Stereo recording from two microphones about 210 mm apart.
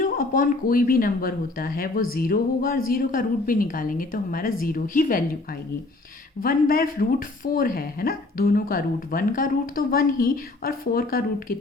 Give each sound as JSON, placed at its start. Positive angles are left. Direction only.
{"t": 0.0, "sound": "a woman's voice", "side_deg": 40}
{"t": 6.4, "sound": "speech", "side_deg": 45}